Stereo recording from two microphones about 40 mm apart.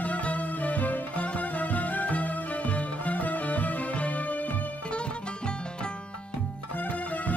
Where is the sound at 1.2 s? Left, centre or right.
Left.